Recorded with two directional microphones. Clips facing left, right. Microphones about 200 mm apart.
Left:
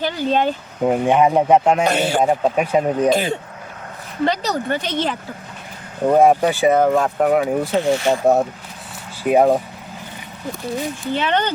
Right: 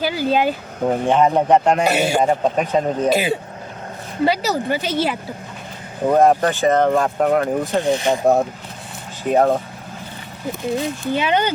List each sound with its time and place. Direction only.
0.0 s speech: 5° right (ahead or behind)
0.9 s speech: 10° left (ahead or behind)
1.9 s speech: 10° right (ahead or behind)
2.2 s speech: 5° left (ahead or behind)
3.1 s speech: 10° right (ahead or behind)
6.1 s speech: 10° left (ahead or behind)
7.8 s speech: 15° right (ahead or behind)
8.2 s speech: 5° left (ahead or behind)
11.1 s speech: 10° right (ahead or behind)